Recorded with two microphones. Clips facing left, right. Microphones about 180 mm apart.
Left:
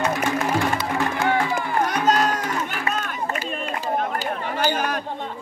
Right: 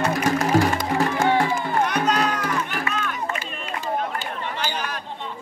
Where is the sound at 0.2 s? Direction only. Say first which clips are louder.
Right 3 dB; 40° right (ahead or behind).